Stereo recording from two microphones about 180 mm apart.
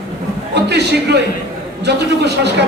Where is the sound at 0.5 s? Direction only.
70° right (ahead or behind).